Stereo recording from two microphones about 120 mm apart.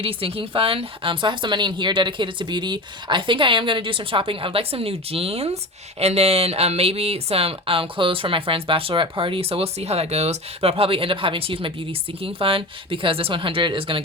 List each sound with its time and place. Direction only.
0.0 s speech: 50° right (ahead or behind)